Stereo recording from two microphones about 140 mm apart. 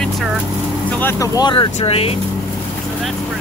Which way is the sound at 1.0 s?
25° left (ahead or behind).